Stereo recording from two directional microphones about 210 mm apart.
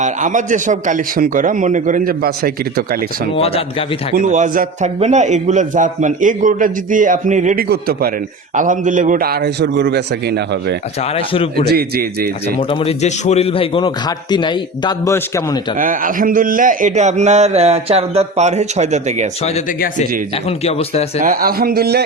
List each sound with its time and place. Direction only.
0.0 s speech: 35° right (ahead or behind)
3.3 s a man's voice: 25° left (ahead or behind)
4.1 s a man's voice: 35° right (ahead or behind)
12.5 s a man's voice: 30° left (ahead or behind)
15.8 s speech: 40° right (ahead or behind)
19.5 s a man's voice: 35° left (ahead or behind)
21.2 s a man's voice: 40° right (ahead or behind)